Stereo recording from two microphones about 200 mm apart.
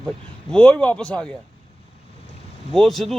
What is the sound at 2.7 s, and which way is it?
Speech, centre (ahead or behind).